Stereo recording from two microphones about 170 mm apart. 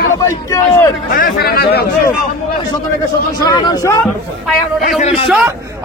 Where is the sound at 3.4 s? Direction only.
25° left (ahead or behind).